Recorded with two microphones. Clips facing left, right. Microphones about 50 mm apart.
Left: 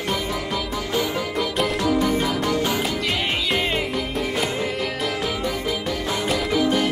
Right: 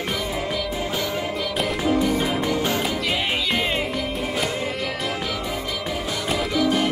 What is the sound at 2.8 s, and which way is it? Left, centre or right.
Music, centre.